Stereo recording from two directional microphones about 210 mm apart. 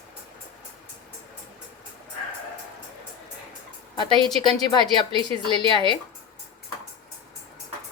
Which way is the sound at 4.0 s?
20° left (ahead or behind).